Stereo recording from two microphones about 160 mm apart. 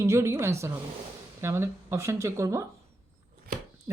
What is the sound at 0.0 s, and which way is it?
Speech, 15° right (ahead or behind).